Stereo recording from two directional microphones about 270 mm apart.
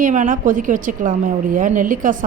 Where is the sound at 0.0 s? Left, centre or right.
Right.